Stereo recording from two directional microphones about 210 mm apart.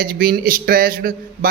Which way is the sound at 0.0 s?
45° right (ahead or behind).